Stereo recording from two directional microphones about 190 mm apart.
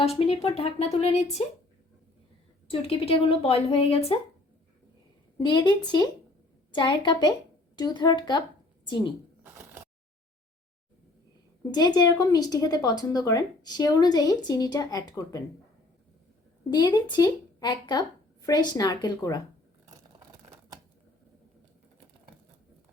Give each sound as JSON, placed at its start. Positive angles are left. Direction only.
{"t": 0.0, "sound": "speech", "side_deg": 30}
{"t": 2.6, "sound": "speech", "side_deg": 30}
{"t": 5.4, "sound": "speech", "side_deg": 25}
{"t": 9.4, "sound": "a sound", "side_deg": -10}
{"t": 11.7, "sound": "speech", "side_deg": 20}
{"t": 16.6, "sound": "speech", "side_deg": 25}